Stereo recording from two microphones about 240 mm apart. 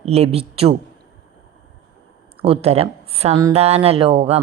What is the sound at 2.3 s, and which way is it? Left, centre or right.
A woman's voice, right.